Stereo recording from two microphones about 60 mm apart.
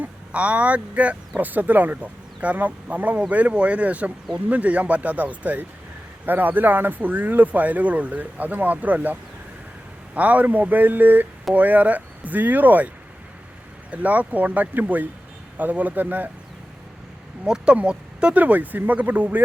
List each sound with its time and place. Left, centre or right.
0.0 s speech: right
10.2 s speech: right
13.9 s speech: right
17.4 s speech: centre